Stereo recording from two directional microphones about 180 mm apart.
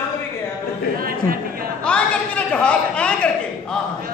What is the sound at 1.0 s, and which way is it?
Chatter, 55° right (ahead or behind).